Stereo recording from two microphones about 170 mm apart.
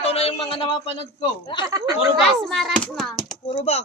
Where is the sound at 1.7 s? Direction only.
20° right (ahead or behind).